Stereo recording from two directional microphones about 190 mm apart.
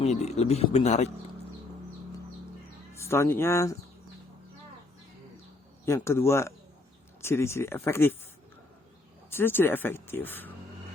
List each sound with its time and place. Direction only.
0.0 s a man's voice: 35° left (ahead or behind)
2.9 s speech: 15° left (ahead or behind)
5.8 s speech: 15° left (ahead or behind)
9.3 s speech: 10° left (ahead or behind)